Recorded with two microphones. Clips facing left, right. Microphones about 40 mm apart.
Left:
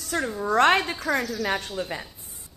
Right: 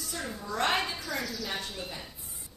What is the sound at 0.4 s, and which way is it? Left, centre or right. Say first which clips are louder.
A woman's voice: left 9 dB; left.